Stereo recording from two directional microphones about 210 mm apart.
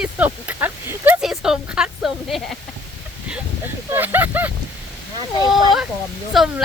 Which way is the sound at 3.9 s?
10° right (ahead or behind).